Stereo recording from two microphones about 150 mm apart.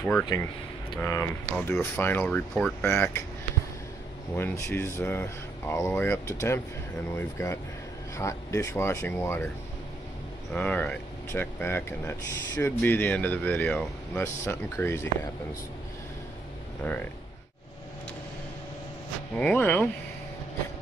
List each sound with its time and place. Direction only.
0.3 s speech: 25° left (ahead or behind)
4.4 s speech: 15° left (ahead or behind)
10.5 s speech: 10° left (ahead or behind)
19.3 s speech: 10° left (ahead or behind)